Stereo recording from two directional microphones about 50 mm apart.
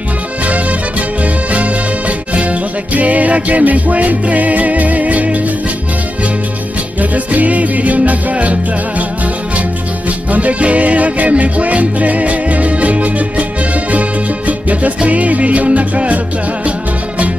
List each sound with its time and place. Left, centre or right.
1.5 s music: right
7.0 s music: right
10.3 s music: right
14.7 s music: right